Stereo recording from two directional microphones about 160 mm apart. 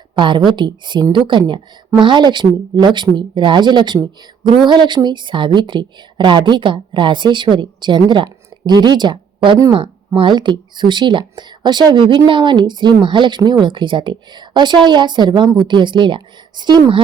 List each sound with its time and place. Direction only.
0.2 s speech: 30° right (ahead or behind)